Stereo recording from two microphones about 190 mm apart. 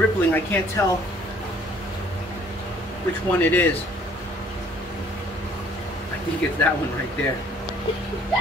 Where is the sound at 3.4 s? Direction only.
10° left (ahead or behind).